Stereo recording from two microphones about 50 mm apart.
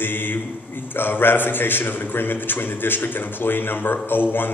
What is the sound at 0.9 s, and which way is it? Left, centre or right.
A man's voice, left.